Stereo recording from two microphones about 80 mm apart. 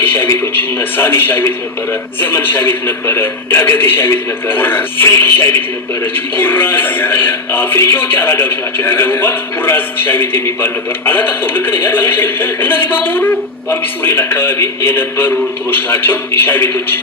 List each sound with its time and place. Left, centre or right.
0.0 s a man's voice: left